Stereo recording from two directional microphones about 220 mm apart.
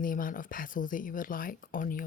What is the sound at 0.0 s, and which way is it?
Speech, 40° left (ahead or behind).